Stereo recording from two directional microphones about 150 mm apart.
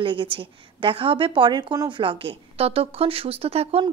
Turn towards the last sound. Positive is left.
turn(degrees=-40)  # may be behind; listen again after turning